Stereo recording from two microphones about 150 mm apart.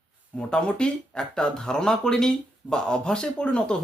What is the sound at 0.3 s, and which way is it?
Speech, 5° left (ahead or behind).